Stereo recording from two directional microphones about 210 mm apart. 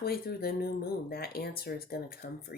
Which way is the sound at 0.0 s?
45° left (ahead or behind).